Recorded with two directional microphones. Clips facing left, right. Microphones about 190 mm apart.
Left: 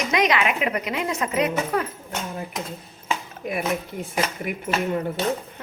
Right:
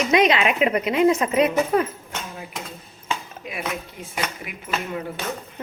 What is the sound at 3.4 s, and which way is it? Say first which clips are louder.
Speech: left 7 dB; 50° left (ahead or behind).